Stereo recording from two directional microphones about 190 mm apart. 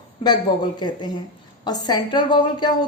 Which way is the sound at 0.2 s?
25° left (ahead or behind).